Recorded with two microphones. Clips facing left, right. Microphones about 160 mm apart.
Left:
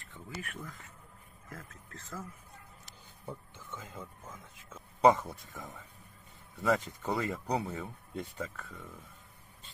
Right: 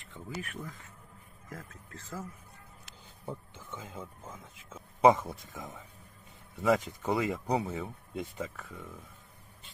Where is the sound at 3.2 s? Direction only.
10° right (ahead or behind).